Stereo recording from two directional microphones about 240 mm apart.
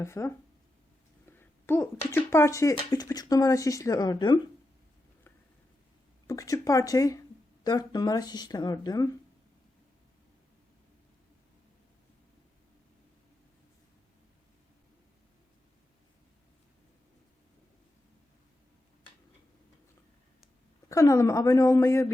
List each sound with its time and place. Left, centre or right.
0.0 s speech: centre
1.4 s speech: centre
6.2 s speech: centre
20.9 s speech: centre